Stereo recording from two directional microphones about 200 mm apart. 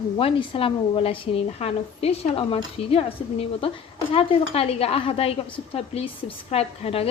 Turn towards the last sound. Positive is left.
turn(degrees=30)  # may be behind; listen again after turning